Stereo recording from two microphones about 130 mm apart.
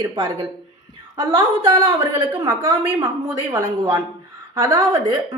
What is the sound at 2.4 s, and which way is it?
A woman's voice, 20° right (ahead or behind).